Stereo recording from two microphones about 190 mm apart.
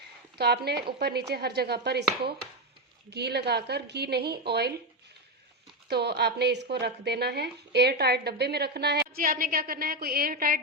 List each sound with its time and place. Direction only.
0.3 s speech: 60° right (ahead or behind)
5.9 s speech: 60° right (ahead or behind)